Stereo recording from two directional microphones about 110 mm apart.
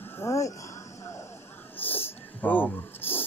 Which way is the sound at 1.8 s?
20° left (ahead or behind).